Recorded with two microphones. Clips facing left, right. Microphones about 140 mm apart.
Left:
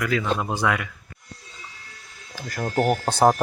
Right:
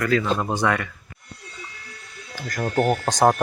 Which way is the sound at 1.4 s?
70° right (ahead or behind).